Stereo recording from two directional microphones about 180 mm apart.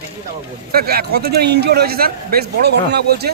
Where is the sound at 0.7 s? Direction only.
60° right (ahead or behind).